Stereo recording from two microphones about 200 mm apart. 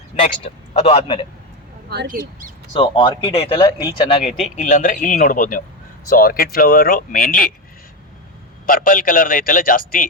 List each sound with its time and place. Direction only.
0.4 s a man's voice: 30° left (ahead or behind)
1.9 s speech: 50° right (ahead or behind)
2.7 s a man's voice: 25° left (ahead or behind)
4.2 s speech: 40° left (ahead or behind)
8.6 s speech: 45° left (ahead or behind)